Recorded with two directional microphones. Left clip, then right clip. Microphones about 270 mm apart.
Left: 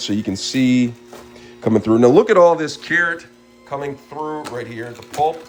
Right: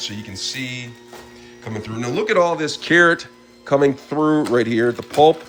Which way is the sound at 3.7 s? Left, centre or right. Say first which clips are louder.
Right 10 dB; right.